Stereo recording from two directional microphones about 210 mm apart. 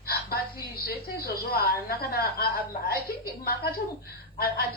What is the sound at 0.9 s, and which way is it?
A woman's voice, 50° left (ahead or behind).